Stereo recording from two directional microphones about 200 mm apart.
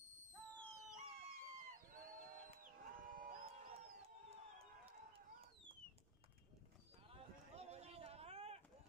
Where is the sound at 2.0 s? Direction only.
45° right (ahead or behind).